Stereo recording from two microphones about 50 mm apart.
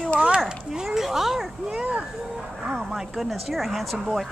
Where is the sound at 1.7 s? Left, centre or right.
Right.